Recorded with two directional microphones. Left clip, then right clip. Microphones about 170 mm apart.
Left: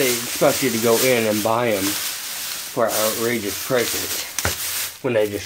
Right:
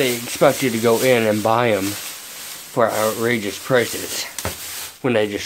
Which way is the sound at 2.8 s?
35° right (ahead or behind).